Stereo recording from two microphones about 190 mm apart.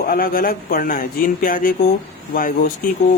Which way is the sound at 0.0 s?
50° left (ahead or behind).